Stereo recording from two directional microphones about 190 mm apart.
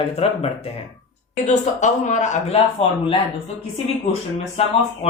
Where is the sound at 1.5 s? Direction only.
40° left (ahead or behind).